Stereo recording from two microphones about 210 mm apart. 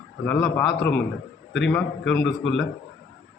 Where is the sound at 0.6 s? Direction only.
55° left (ahead or behind).